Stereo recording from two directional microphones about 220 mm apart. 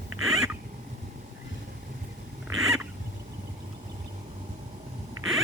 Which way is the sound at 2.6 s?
5° right (ahead or behind).